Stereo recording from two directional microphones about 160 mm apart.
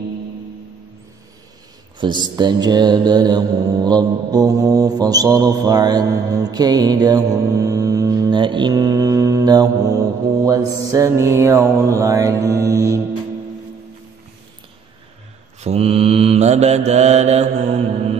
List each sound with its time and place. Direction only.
2.0 s mantra: 30° right (ahead or behind)
15.6 s mantra: 40° right (ahead or behind)